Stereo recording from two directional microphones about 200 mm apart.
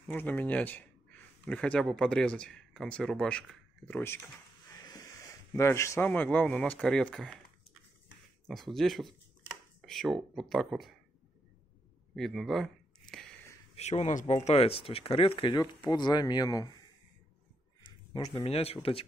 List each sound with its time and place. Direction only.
0.1 s speech: 10° left (ahead or behind)
4.6 s a sound: 15° left (ahead or behind)
6.0 s speech: 5° left (ahead or behind)
8.5 s speech: centre (ahead or behind)
12.2 s speech: centre (ahead or behind)
13.7 s speech: 35° left (ahead or behind)